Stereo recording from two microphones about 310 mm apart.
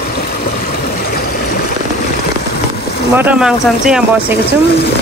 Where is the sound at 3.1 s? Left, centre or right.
Centre.